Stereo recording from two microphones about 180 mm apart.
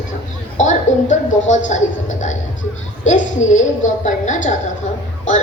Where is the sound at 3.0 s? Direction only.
45° left (ahead or behind).